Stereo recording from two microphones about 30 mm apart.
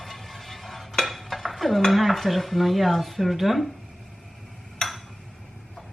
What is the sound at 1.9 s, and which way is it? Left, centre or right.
A woman's voice, centre.